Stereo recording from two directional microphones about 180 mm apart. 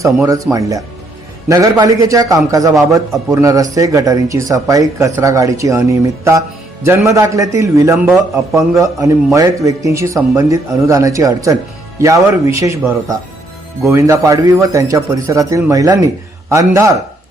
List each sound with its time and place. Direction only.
0.0 s a man's voice: 20° right (ahead or behind)
1.5 s a man's voice: 20° right (ahead or behind)
13.8 s a man's voice: 15° right (ahead or behind)